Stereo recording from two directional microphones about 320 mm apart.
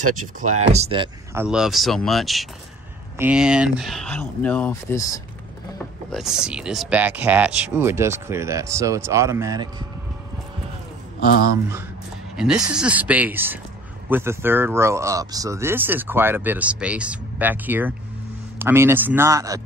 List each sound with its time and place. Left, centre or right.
0.4 s speech: right; by 5.2 s centre
6.1 s speech: centre
11.1 s a man's voice: left
12.4 s speech: centre